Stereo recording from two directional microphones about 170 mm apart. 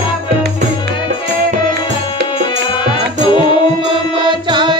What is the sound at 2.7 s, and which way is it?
Music, 30° left (ahead or behind).